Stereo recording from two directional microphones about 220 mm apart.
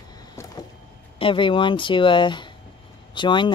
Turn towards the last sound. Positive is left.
turn(degrees=20)  # may be behind; listen again after turning